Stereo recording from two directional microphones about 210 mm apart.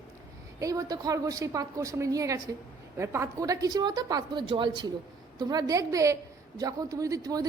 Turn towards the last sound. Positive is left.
turn(degrees=-15)  # may be behind; listen again after turning